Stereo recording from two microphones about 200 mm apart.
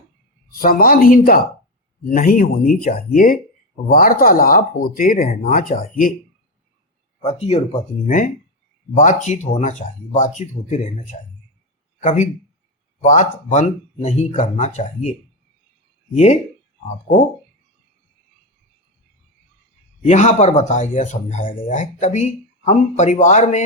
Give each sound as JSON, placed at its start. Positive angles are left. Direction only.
{"t": 0.6, "sound": "speech", "side_deg": 45}
{"t": 7.3, "sound": "speech", "side_deg": 30}
{"t": 16.1, "sound": "speech", "side_deg": 35}
{"t": 20.1, "sound": "speech", "side_deg": 35}